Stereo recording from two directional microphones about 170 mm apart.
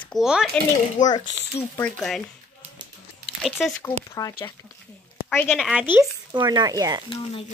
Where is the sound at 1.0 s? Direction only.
50° left (ahead or behind).